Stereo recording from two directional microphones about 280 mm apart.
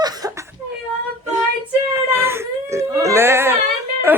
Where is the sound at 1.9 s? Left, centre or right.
Centre.